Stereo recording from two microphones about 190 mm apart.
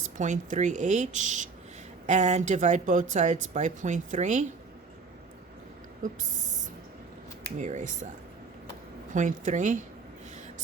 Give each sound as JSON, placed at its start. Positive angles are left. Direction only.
{"t": 0.2, "sound": "speech", "side_deg": -40}
{"t": 7.6, "sound": "speech", "side_deg": -40}
{"t": 9.1, "sound": "speech", "side_deg": -45}